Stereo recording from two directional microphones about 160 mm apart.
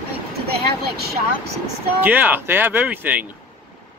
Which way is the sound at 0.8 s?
80° right.